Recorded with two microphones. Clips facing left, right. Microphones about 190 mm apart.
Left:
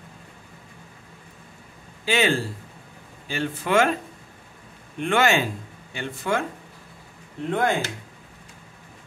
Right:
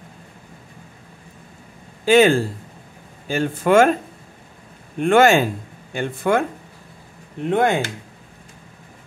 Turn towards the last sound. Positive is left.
turn(degrees=-65)  # may be behind; listen again after turning